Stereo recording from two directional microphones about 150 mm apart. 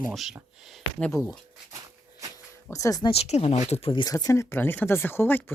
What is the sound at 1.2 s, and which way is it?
Speech, 20° left (ahead or behind).